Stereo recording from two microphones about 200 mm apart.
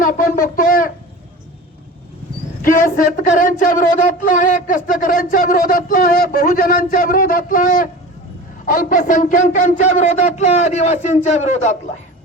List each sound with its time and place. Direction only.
0.0 s speech: 45° left (ahead or behind)
2.6 s speech: 40° left (ahead or behind)